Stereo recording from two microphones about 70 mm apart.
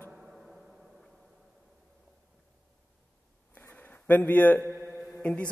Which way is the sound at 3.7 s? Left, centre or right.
Left.